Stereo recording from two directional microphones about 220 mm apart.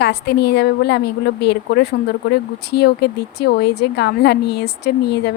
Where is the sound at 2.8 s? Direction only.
50° left (ahead or behind).